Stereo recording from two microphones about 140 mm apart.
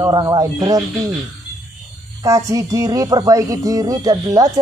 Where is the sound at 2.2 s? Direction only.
25° right (ahead or behind).